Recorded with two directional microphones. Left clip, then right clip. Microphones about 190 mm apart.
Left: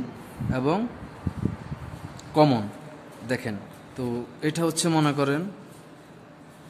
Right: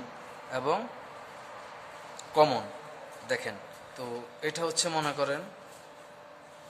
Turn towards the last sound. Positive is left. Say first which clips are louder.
# left 6 dB
turn(degrees=25)  # may be behind; listen again after turning